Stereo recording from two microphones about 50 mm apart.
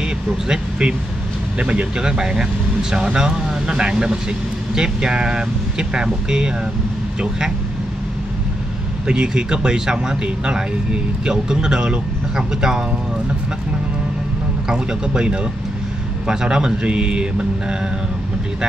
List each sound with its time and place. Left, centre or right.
0.5 s speech: centre
9.0 s speech: centre
14.7 s speech: centre